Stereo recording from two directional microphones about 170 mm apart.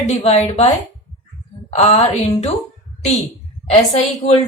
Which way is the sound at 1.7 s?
40° left (ahead or behind).